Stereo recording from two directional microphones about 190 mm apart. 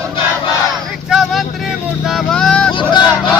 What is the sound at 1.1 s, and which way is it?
Vehicle, centre (ahead or behind).